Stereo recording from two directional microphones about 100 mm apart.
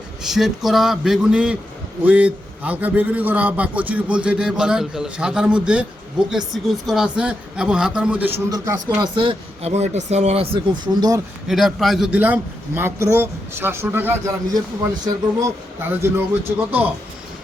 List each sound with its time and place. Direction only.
0.2 s a man's voice: 5° right (ahead or behind)
6.3 s a man's voice: centre (ahead or behind)
8.4 s speech: 35° right (ahead or behind)
8.9 s speech: 50° right (ahead or behind); by 10.6 s 85° right
10.7 s speech: 40° right (ahead or behind)
11.4 s a man's voice: centre (ahead or behind)
12.1 s speech: 15° right (ahead or behind)
15.8 s speech: 20° right (ahead or behind)